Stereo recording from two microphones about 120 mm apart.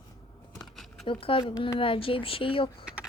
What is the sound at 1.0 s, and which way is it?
A woman's voice, 45° left (ahead or behind).